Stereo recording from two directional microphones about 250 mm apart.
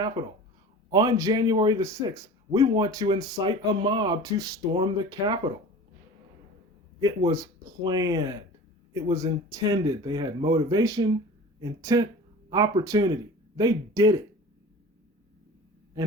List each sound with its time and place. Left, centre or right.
0.9 s speech: centre
7.0 s speech: centre